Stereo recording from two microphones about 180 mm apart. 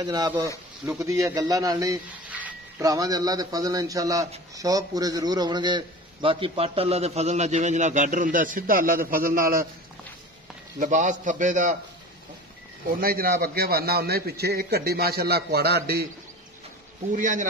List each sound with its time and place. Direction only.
0.0 s a man's voice: 20° right (ahead or behind)
2.2 s a sound: 10° right (ahead or behind)
2.8 s a man's voice: 20° right (ahead or behind); by 9.7 s 50° right (ahead or behind)
10.8 s a man's voice: 45° right (ahead or behind)
13.0 s a man's voice: 55° right (ahead or behind)
17.1 s a man's voice: 45° right (ahead or behind)